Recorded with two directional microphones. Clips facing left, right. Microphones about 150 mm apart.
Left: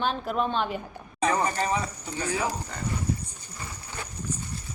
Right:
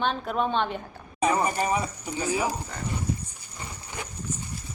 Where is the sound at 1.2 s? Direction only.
10° right (ahead or behind).